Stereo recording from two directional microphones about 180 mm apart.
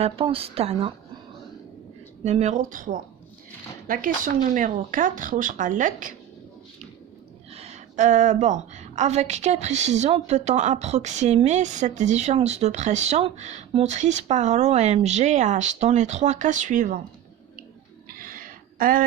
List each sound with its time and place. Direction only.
0.0 s a woman's voice: 30° right (ahead or behind)
2.2 s speech: 40° right (ahead or behind)
7.5 s a woman's voice: 40° right (ahead or behind)
18.1 s a sound: 50° right (ahead or behind)